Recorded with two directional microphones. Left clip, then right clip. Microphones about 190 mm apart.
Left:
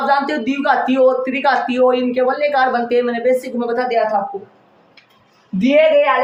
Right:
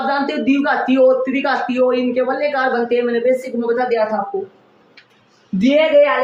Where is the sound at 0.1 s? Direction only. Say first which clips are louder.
Left 1 dB; 35° left (ahead or behind).